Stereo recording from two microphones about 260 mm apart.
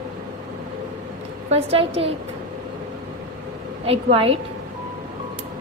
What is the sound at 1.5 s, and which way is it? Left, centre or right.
Speech, right.